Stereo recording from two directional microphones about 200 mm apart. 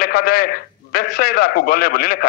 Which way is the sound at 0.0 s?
50° left (ahead or behind).